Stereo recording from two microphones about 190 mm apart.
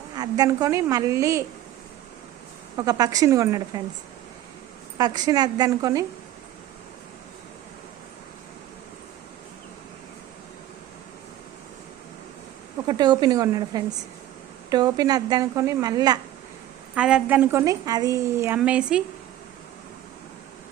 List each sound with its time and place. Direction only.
0.2 s a woman's voice: 20° right (ahead or behind)
2.7 s a woman's voice: 20° right (ahead or behind)
4.9 s a woman's voice: 20° right (ahead or behind)
12.9 s a woman's voice: 20° right (ahead or behind)
16.9 s a woman's voice: 5° right (ahead or behind)